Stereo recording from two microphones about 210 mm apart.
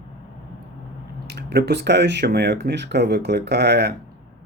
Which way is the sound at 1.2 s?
50° right (ahead or behind).